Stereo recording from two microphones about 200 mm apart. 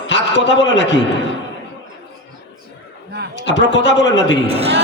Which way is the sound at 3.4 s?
65° left (ahead or behind).